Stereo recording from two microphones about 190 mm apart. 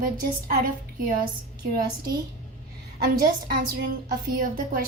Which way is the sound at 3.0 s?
50° right (ahead or behind).